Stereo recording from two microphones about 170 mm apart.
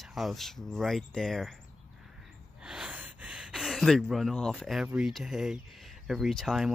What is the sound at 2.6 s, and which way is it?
Gasp, 5° right (ahead or behind).